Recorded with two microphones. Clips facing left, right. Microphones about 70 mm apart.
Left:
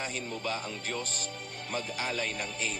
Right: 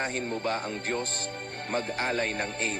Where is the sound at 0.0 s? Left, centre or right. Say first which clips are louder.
Right 5 dB; right.